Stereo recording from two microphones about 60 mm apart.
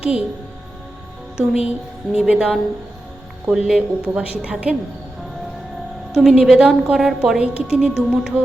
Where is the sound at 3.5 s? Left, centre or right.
Centre.